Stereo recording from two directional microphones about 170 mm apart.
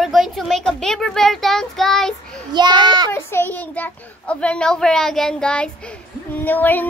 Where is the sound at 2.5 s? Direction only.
25° right (ahead or behind).